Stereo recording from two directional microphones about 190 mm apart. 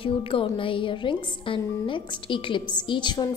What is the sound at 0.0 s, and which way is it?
A woman's voice, 30° left (ahead or behind).